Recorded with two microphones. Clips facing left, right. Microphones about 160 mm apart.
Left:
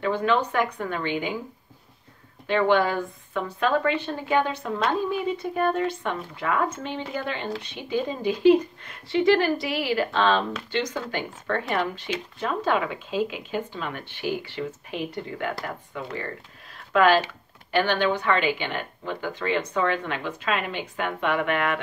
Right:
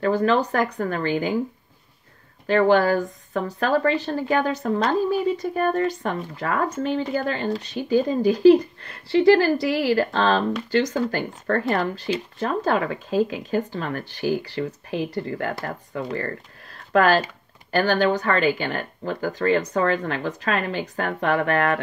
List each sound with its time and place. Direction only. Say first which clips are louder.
0.0 s speech: right 3 dB; 40° right (ahead or behind)
2.4 s speech: right 4 dB; 40° right (ahead or behind)